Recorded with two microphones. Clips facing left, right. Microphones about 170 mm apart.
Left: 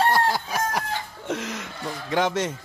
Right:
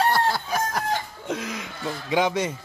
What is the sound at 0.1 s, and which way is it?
Chicken, 10° left (ahead or behind).